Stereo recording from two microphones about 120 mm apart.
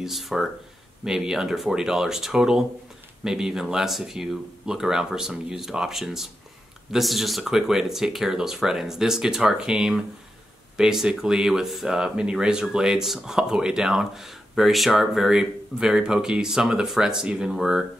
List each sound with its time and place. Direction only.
0.0 s speech: centre (ahead or behind)